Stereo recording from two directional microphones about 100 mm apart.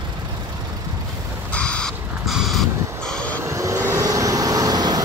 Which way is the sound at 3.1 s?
10° left (ahead or behind).